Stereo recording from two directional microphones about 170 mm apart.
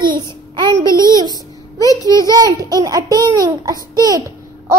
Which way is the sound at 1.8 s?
20° left (ahead or behind).